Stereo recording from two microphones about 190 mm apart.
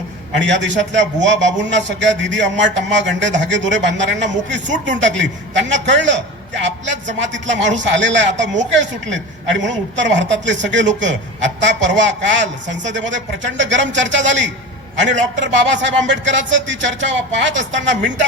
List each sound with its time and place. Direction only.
0.4 s a woman's voice: 75° right (ahead or behind)